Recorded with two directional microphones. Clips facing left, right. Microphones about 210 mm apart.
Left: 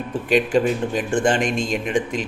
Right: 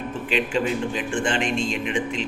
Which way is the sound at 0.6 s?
40° left (ahead or behind).